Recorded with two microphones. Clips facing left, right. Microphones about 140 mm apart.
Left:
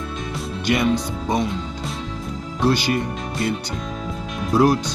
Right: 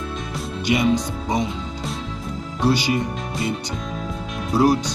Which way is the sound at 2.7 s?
15° right (ahead or behind).